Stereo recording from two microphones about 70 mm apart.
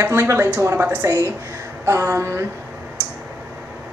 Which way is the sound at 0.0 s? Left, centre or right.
Right.